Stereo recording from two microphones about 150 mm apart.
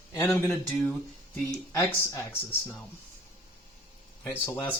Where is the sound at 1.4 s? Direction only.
20° left (ahead or behind).